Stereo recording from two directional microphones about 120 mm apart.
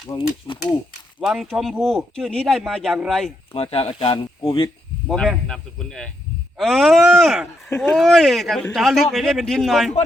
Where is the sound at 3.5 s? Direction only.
55° left (ahead or behind).